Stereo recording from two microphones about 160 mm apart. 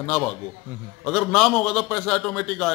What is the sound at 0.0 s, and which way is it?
A man's voice, 10° left (ahead or behind).